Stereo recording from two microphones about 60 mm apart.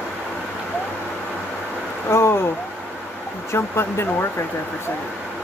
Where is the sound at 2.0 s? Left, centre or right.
Left.